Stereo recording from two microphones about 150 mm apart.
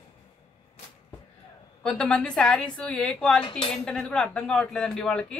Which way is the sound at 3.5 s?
35° left (ahead or behind).